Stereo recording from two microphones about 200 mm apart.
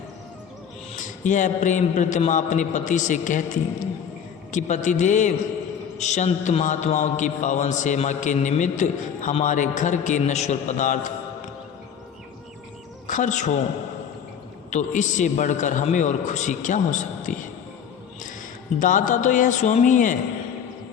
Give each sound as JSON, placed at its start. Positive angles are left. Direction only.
{"t": 1.2, "sound": "a man's voice", "side_deg": 40}
{"t": 4.5, "sound": "a man's voice", "side_deg": 35}
{"t": 13.1, "sound": "speech", "side_deg": 40}
{"t": 14.7, "sound": "a man's voice", "side_deg": 35}
{"t": 18.8, "sound": "a man's voice", "side_deg": 40}